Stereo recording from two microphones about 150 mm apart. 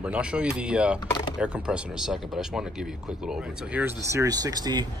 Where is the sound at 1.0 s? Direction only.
30° left (ahead or behind).